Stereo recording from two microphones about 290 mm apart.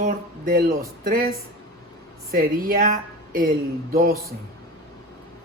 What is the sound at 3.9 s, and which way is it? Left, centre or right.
Speech, right.